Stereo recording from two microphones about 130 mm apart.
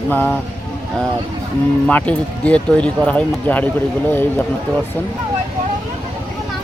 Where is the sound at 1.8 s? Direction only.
10° left (ahead or behind).